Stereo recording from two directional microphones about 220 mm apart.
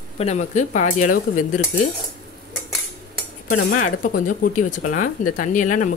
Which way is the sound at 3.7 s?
35° left (ahead or behind).